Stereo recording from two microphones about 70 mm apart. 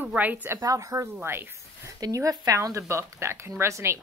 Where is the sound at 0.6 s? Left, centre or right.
Right.